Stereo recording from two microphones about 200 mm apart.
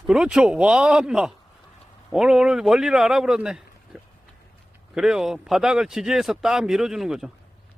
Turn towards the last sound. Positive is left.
turn(degrees=0)  # may be behind; listen again after turning